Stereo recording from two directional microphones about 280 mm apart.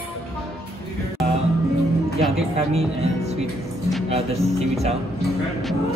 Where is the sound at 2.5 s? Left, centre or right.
Right.